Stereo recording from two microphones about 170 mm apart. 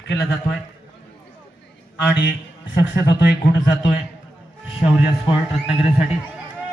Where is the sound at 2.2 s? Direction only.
90° left.